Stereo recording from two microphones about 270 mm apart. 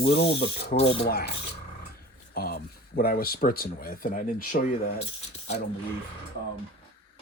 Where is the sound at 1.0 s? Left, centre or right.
Left.